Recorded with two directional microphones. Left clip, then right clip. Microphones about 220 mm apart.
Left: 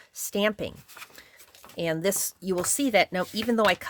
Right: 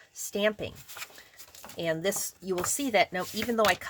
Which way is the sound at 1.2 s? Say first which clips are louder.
Left 2 dB; 45° left (ahead or behind).